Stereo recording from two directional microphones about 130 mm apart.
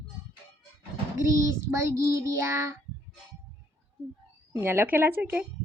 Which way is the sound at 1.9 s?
25° right (ahead or behind).